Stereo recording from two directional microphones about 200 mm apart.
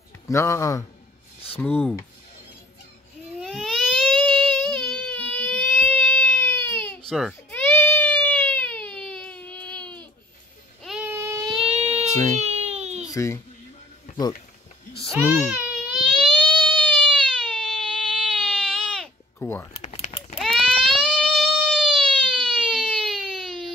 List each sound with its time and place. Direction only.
0.3 s speech: 15° left (ahead or behind)
3.3 s baby cry: centre (ahead or behind)
7.1 s baby cry: centre (ahead or behind)
10.8 s child singing: 5° right (ahead or behind)
11.5 s a sound: 30° right (ahead or behind)
12.4 s baby cry: 30° right (ahead or behind)
13.1 s speech: 15° left (ahead or behind)
15.0 s baby cry: centre (ahead or behind)
19.4 s speech: 10° left (ahead or behind)
19.7 s a sound: 35° left (ahead or behind)
20.3 s baby cry: centre (ahead or behind)